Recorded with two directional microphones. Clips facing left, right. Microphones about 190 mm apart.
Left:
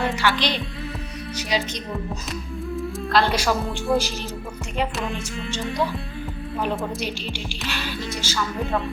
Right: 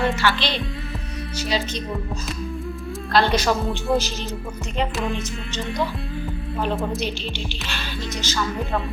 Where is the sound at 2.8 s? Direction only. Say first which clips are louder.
Even; centre (ahead or behind).